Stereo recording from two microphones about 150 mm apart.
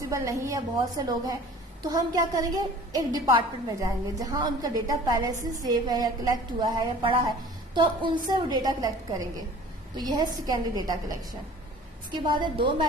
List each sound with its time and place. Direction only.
0.0 s a woman's voice: 20° right (ahead or behind)
12.1 s a woman's voice: 30° right (ahead or behind)